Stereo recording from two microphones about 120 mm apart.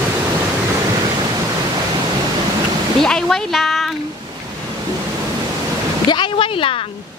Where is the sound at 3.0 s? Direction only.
5° left (ahead or behind).